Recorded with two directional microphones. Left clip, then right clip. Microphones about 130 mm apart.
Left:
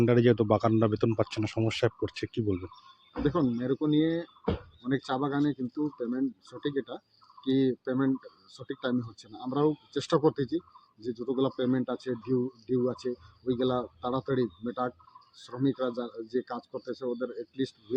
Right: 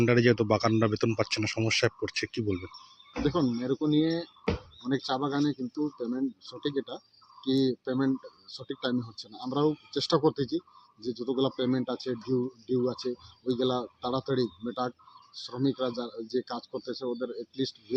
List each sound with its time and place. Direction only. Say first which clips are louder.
0.0 s speech: even; 20° left (ahead or behind)